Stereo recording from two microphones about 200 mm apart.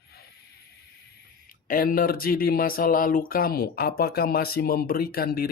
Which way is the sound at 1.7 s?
45° left (ahead or behind).